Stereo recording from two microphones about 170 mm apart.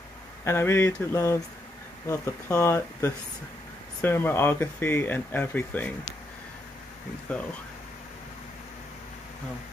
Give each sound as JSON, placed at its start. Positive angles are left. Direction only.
{"t": 0.5, "sound": "speech", "side_deg": 15}
{"t": 7.3, "sound": "speech", "side_deg": 5}